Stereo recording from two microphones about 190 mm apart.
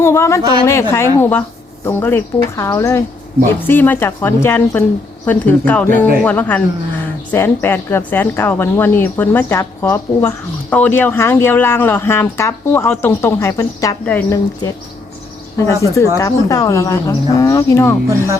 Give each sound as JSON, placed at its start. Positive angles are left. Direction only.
{"t": 0.0, "sound": "speech", "side_deg": 15}
{"t": 15.5, "sound": "speech", "side_deg": 15}